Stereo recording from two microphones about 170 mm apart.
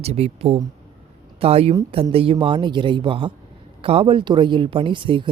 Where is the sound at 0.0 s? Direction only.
40° right (ahead or behind).